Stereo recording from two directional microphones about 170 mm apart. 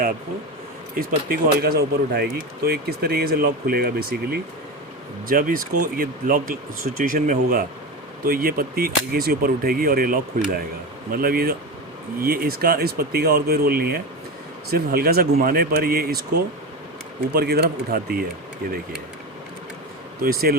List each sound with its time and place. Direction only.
1.3 s speech: 65° right (ahead or behind)
20.2 s speech: 60° right (ahead or behind)